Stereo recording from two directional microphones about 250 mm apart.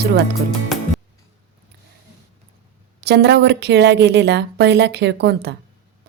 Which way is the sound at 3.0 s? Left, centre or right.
Right.